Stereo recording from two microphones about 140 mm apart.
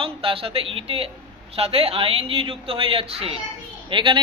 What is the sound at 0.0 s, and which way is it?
A man's voice, 40° right (ahead or behind).